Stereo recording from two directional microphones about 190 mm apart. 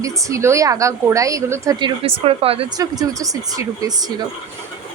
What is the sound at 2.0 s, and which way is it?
Speech, 30° right (ahead or behind).